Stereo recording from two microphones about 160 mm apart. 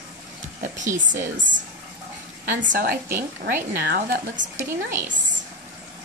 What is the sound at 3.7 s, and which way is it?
Speech, 75° right (ahead or behind).